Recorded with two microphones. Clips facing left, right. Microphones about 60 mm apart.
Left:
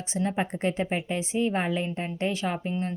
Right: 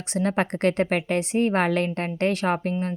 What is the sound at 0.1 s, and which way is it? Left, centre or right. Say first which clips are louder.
Speech: right 4 dB; right.